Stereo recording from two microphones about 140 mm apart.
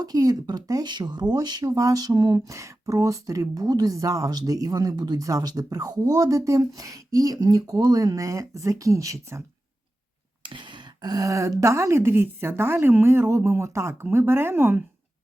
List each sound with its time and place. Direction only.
0.0 s speech: 25° right (ahead or behind)
10.4 s speech: 35° right (ahead or behind); by 14.8 s 15° right (ahead or behind)